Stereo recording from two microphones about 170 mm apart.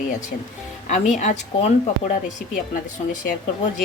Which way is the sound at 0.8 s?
45° left (ahead or behind).